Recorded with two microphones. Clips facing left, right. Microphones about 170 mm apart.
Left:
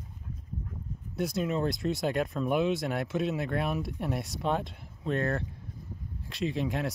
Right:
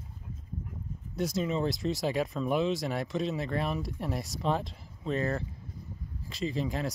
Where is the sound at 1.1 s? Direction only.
Centre (ahead or behind).